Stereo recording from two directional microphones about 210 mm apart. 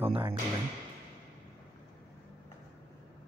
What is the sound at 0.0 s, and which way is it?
Speech, 25° right (ahead or behind).